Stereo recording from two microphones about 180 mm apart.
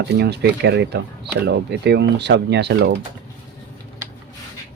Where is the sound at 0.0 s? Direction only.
70° right (ahead or behind).